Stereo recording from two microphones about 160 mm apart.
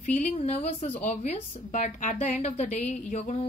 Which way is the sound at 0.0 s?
50° left (ahead or behind).